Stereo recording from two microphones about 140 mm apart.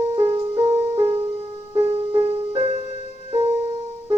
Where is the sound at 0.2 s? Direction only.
45° right (ahead or behind).